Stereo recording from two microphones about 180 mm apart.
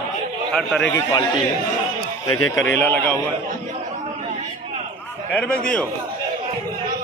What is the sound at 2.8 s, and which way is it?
Speech, 10° left (ahead or behind).